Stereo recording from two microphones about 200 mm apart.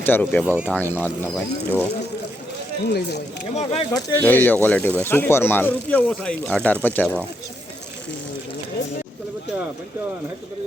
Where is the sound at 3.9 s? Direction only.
15° left (ahead or behind).